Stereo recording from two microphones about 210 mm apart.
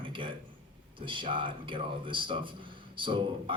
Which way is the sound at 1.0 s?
25° right (ahead or behind).